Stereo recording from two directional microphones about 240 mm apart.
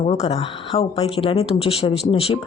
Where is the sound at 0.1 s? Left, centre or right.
Left.